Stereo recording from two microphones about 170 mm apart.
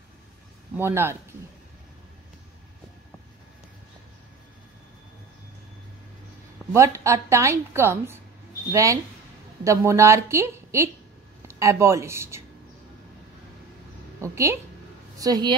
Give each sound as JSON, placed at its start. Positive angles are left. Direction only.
{"t": 0.7, "sound": "a woman's voice", "side_deg": -15}
{"t": 6.7, "sound": "a woman's voice", "side_deg": -15}
{"t": 14.2, "sound": "a woman's voice", "side_deg": -15}